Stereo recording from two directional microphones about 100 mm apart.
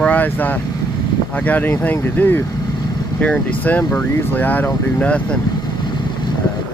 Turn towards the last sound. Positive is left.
turn(degrees=10)  # may be behind; listen again after turning